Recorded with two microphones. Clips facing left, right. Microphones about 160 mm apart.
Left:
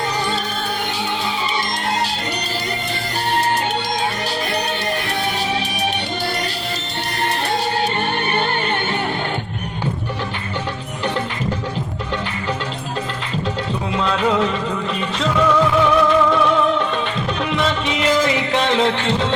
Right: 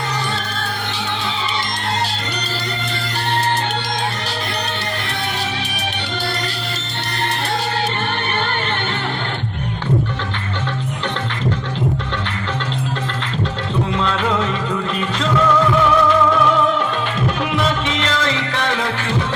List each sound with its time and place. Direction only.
13.9 s music: 5° left (ahead or behind)
17.5 s music: centre (ahead or behind)
18.2 s music: 15° left (ahead or behind)